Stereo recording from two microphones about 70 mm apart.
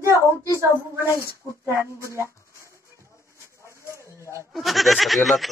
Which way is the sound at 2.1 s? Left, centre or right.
Right.